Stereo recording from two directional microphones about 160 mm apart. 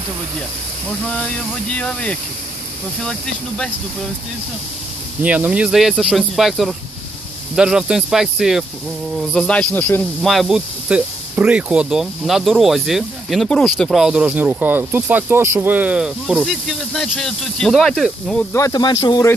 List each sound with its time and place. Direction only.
1.0 s speech: 5° left (ahead or behind)
5.2 s speech: 10° right (ahead or behind); by 10.3 s 10° left (ahead or behind)
10.3 s speech: centre (ahead or behind)
18.5 s speech: 25° left (ahead or behind)